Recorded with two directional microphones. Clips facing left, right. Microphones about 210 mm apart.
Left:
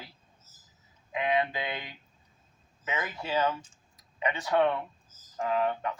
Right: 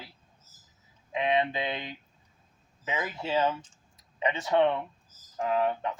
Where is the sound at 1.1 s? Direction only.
25° right (ahead or behind).